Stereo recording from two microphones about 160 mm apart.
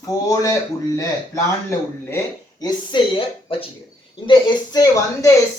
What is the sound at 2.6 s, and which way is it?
Speech, 30° left (ahead or behind).